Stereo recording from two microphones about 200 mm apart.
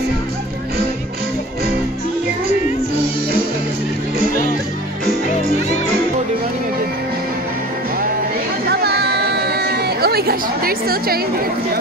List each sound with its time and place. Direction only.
8.8 s chatter: 55° right (ahead or behind)